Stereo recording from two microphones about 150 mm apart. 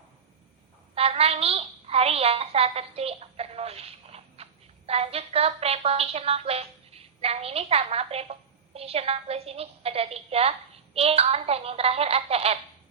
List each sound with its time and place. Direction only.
0.9 s a woman's voice: 40° right (ahead or behind)